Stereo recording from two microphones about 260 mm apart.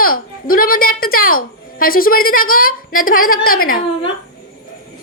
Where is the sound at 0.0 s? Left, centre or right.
Left.